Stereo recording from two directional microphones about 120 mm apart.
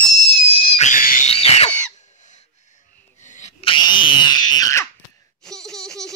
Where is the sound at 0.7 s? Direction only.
80° left.